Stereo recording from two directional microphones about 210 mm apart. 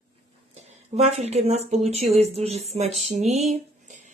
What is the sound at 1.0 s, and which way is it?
Speech, 30° right (ahead or behind).